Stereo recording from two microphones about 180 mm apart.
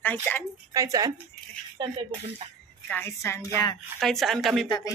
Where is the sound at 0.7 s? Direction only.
20° right (ahead or behind).